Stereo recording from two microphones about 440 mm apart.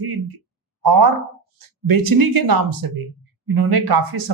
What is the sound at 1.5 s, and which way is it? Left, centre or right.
Speech, right.